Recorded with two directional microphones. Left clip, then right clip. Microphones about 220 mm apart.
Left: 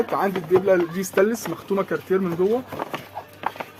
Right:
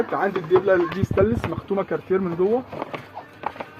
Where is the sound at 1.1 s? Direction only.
20° left (ahead or behind).